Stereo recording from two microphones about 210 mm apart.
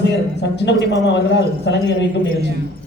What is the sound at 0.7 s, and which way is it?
Speech, 55° left (ahead or behind).